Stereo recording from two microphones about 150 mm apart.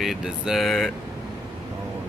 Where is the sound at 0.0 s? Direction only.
Centre (ahead or behind).